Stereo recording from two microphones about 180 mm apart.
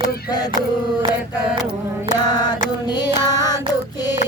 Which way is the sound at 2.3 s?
20° left (ahead or behind).